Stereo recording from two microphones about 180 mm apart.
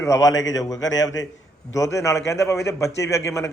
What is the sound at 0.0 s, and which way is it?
A man's voice, 20° left (ahead or behind).